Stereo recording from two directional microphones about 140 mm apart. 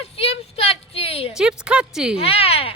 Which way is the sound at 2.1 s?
45° left (ahead or behind).